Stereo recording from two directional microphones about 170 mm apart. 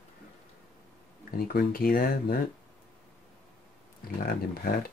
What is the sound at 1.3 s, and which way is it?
Speech, 60° left (ahead or behind).